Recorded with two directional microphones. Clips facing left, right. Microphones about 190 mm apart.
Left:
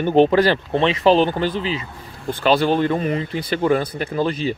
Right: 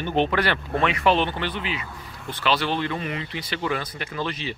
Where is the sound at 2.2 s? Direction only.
50° left (ahead or behind).